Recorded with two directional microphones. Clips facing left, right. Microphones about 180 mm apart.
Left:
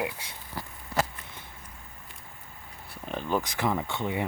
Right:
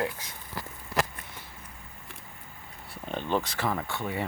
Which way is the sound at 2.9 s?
5° left (ahead or behind).